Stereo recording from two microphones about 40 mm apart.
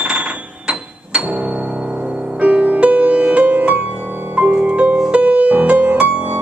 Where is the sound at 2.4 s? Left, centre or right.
Right.